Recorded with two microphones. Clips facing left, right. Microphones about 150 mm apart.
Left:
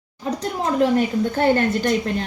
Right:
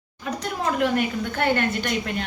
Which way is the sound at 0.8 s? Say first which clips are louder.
Left 7 dB; 35° left (ahead or behind).